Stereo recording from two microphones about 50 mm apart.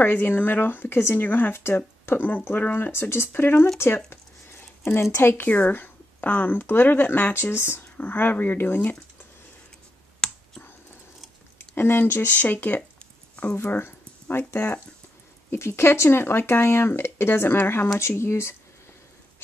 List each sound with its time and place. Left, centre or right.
0.0 s speech: left
1.1 s speech: left
2.9 s speech: left
3.7 s a sound: left
5.0 s speech: left
5.5 s speech: left
7.3 s speech: left
10.2 s clicking: centre
11.7 s speech: left
15.5 s speech: left
17.9 s speech: left